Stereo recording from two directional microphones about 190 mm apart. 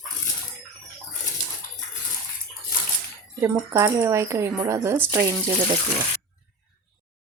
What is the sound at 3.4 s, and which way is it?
Speech, 15° right (ahead or behind).